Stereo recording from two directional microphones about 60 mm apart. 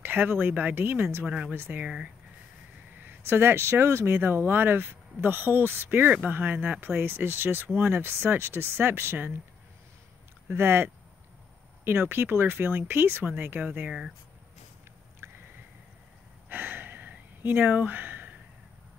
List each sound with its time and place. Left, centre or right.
0.0 s speech: right
1.2 s speech: centre
1.5 s speech: right
3.3 s speech: right
10.5 s speech: right
13.8 s speech: centre
16.4 s a sound: right